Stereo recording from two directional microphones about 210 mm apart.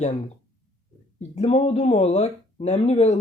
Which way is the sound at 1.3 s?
30° left (ahead or behind).